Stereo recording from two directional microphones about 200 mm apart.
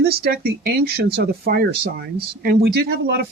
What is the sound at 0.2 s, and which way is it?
A woman's voice, 50° right (ahead or behind).